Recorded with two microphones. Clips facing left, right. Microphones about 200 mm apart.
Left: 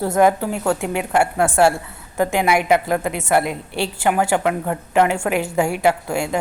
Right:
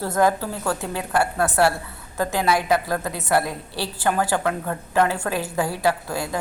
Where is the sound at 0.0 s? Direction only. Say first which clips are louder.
Left 4 dB; 20° left (ahead or behind).